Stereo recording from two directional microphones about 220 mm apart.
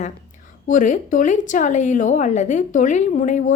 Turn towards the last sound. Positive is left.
turn(degrees=35)  # may be behind; listen again after turning